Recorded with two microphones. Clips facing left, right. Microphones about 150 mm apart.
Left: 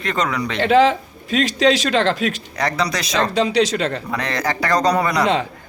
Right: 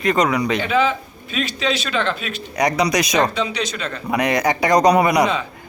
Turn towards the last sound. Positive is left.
turn(degrees=-15)  # may be behind; listen again after turning